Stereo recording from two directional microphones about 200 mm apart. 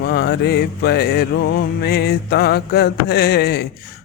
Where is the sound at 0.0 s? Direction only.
55° left (ahead or behind).